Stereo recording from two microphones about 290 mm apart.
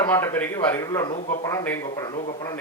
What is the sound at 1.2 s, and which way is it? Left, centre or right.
Speech, left.